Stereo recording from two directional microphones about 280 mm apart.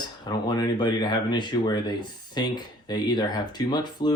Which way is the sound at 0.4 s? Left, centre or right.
Centre.